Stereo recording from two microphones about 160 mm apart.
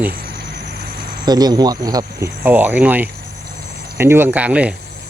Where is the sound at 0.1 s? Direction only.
70° right (ahead or behind).